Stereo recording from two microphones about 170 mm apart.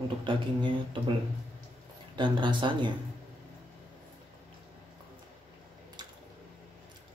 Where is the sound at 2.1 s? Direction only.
30° right (ahead or behind).